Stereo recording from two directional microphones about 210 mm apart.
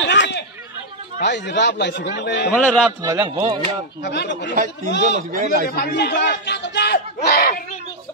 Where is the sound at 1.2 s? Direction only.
55° left (ahead or behind).